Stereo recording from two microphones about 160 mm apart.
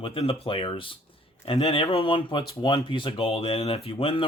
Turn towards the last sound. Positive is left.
turn(degrees=35)  # may be behind; listen again after turning